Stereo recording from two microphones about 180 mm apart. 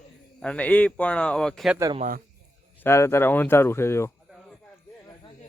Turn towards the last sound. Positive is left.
turn(degrees=15)  # may be behind; listen again after turning